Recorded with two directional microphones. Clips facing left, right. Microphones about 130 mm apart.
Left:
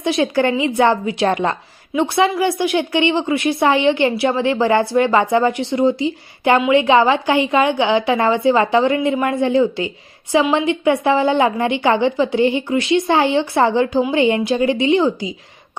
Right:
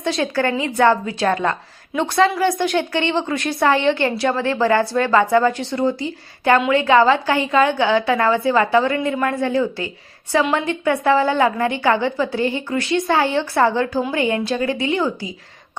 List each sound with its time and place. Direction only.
0.0 s a woman's voice: 15° left (ahead or behind)